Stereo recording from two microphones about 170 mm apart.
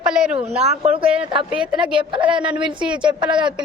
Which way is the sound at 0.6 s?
40° right (ahead or behind).